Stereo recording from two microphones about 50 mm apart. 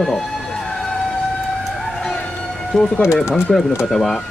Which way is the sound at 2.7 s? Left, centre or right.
Centre.